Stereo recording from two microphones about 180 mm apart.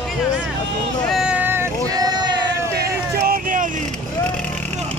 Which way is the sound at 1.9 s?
20° right (ahead or behind).